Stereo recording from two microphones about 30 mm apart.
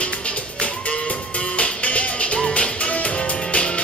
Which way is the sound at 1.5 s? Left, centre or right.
Left.